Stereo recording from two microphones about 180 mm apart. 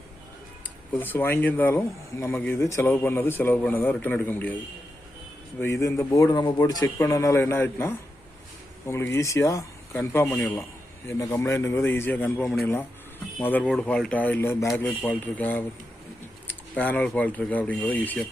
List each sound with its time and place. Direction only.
0.9 s a man's voice: 10° left (ahead or behind)
5.5 s a man's voice: 15° left (ahead or behind)